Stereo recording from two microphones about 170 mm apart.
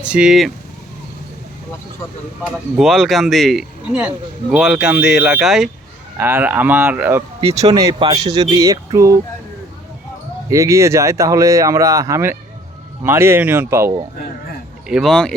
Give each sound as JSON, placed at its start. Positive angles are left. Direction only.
{"t": 0.0, "sound": "speech", "side_deg": -5}
{"t": 2.7, "sound": "speech", "side_deg": 0}
{"t": 6.1, "sound": "speech", "side_deg": -15}
{"t": 7.9, "sound": "speech", "side_deg": -30}
{"t": 10.5, "sound": "speech", "side_deg": -15}
{"t": 14.8, "sound": "speech", "side_deg": 0}